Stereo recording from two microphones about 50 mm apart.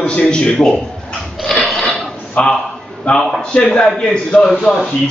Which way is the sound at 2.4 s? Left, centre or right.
Left.